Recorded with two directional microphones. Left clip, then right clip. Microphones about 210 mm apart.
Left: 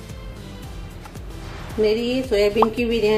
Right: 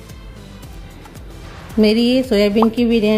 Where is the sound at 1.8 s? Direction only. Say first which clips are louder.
Right 5 dB; 50° right (ahead or behind).